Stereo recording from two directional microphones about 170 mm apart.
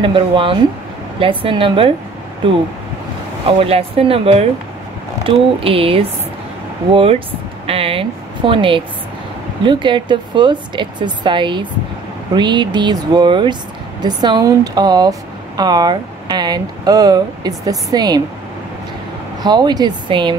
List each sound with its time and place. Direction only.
0.0 s a woman's voice: 30° right (ahead or behind)
3.4 s a woman's voice: 35° right (ahead or behind)
19.4 s speech: 25° right (ahead or behind)